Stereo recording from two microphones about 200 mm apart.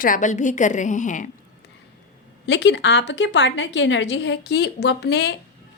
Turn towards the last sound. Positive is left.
turn(degrees=55)  # may be behind; listen again after turning